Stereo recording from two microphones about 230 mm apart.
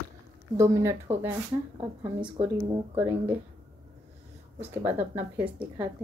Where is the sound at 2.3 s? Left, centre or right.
Right.